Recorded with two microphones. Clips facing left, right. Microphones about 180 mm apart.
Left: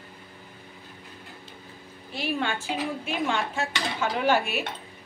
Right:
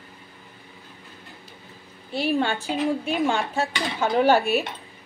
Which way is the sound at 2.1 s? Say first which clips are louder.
Right 5 dB; 30° right (ahead or behind).